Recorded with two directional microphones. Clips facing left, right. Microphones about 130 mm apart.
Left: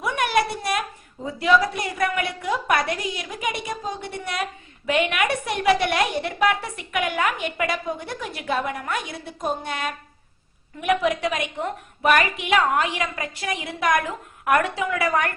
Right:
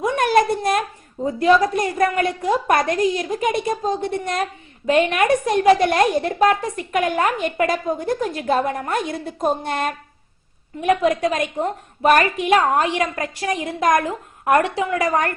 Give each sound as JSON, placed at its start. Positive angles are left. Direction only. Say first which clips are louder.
{"t": 0.2, "sound": "a woman's voice", "louder": "right 5 dB", "side_deg": -45}
{"t": 10.8, "sound": "a woman's voice", "louder": "right 4 dB", "side_deg": -35}